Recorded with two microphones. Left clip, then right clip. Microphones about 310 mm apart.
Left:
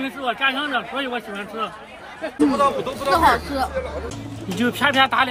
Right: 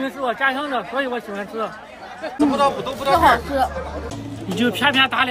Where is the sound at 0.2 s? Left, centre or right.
Centre.